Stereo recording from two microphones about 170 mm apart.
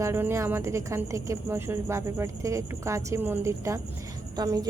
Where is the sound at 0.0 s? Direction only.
15° right (ahead or behind).